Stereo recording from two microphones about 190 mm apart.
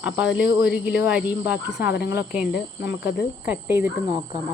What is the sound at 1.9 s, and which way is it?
Speech, 60° left (ahead or behind).